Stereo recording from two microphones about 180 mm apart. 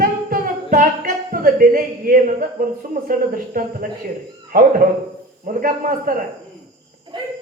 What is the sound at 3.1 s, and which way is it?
Speech, 50° right (ahead or behind).